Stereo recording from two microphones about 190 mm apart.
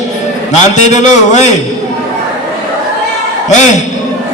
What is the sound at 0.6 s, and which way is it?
Music, 40° left (ahead or behind).